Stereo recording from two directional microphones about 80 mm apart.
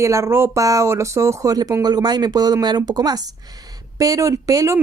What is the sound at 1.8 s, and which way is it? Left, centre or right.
Speech, right.